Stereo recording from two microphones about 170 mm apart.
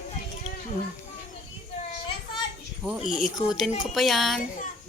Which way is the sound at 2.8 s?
5° right (ahead or behind).